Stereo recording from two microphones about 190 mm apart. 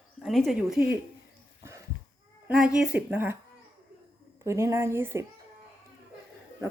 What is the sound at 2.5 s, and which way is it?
Speech, 5° right (ahead or behind).